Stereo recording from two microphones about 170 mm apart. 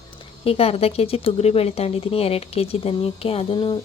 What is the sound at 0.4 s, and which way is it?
Speech, 35° left (ahead or behind).